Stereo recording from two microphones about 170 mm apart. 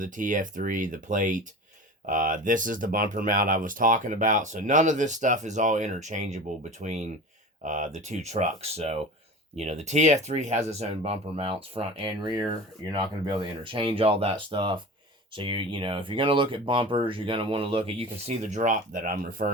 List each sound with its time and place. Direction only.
0.0 s speech: 50° right (ahead or behind); by 18.0 s 35° right (ahead or behind)
18.4 s speech: 45° right (ahead or behind)